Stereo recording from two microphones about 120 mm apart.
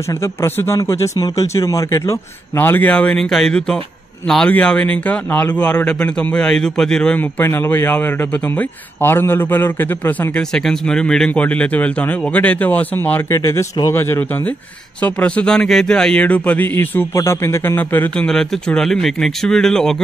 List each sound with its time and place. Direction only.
0.2 s speech: 20° left (ahead or behind)
10.3 s speech: 5° left (ahead or behind)